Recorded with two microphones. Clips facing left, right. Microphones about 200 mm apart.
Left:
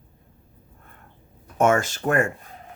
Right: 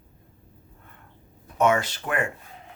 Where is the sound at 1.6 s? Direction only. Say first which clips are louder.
Left 2 dB; 45° left (ahead or behind).